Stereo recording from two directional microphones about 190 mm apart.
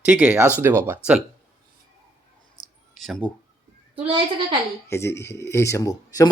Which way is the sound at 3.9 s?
25° right (ahead or behind).